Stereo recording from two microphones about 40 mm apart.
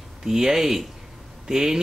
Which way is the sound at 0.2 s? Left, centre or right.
Centre.